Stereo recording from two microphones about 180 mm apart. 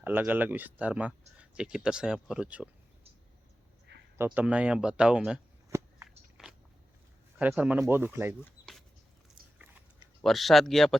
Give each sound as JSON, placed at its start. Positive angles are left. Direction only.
{"t": 0.0, "sound": "speech", "side_deg": -10}
{"t": 4.4, "sound": "speech", "side_deg": -5}
{"t": 5.7, "sound": "a sound", "side_deg": -15}
{"t": 6.1, "sound": "biting", "side_deg": -5}
{"t": 7.3, "sound": "speech", "side_deg": -10}
{"t": 8.6, "sound": "a sound", "side_deg": 20}
{"t": 10.2, "sound": "speech", "side_deg": 0}